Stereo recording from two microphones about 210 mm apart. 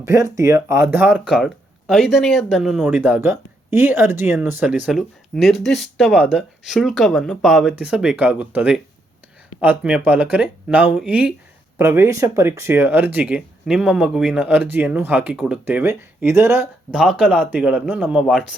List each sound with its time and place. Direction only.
0.0 s speech: 15° right (ahead or behind)